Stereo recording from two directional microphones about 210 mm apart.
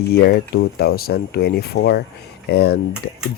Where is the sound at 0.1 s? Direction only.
50° left (ahead or behind).